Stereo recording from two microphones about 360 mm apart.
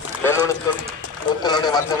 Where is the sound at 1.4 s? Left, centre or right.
Centre.